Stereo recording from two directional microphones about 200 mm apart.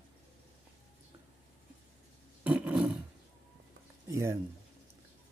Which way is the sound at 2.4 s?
5° right (ahead or behind).